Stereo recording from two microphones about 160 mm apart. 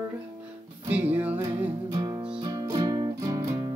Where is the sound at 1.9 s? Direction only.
25° right (ahead or behind).